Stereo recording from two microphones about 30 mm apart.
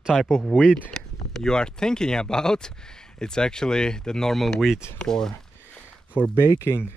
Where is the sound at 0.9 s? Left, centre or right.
Centre.